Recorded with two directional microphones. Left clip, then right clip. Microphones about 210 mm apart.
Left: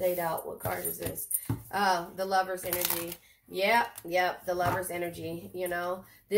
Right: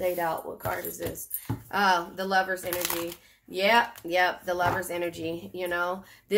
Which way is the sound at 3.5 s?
35° right (ahead or behind).